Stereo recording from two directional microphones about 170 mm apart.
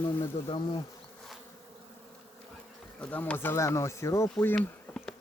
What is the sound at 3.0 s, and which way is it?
Speech, 10° left (ahead or behind).